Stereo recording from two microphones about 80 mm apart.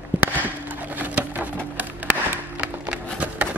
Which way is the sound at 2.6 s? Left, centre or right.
Centre.